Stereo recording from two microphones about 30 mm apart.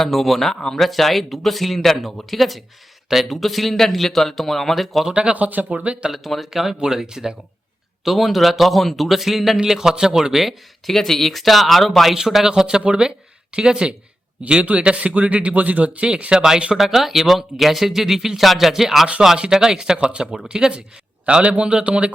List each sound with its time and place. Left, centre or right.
0.0 s speech: centre
5.3 s speech: right
5.7 s speech: right
6.1 s a man's voice: centre
8.0 s speech: centre
9.6 s a man's voice: centre
10.8 s speech: centre
12.5 s speech: right
14.6 s speech: right
16.3 s speech: centre
16.7 s speech: centre
21.4 s speech: right